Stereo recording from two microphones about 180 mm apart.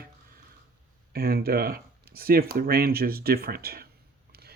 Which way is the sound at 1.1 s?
55° right (ahead or behind).